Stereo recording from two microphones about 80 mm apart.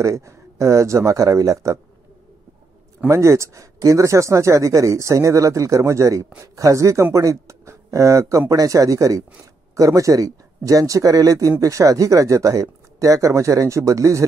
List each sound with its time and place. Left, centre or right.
0.0 s speech: right
3.1 s speech: right